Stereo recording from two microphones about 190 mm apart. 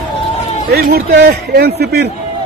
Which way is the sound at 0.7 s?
60° right (ahead or behind).